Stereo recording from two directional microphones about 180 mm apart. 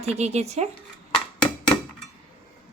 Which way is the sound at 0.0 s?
40° right (ahead or behind).